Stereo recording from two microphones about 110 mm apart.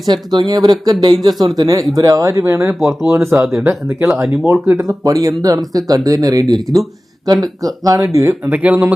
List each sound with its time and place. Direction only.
0.0 s speech: 40° right (ahead or behind); by 4.5 s 25° right (ahead or behind)
4.5 s speech: 15° right (ahead or behind)
4.8 s speech: 35° right (ahead or behind)
8.4 s speech: 15° right (ahead or behind)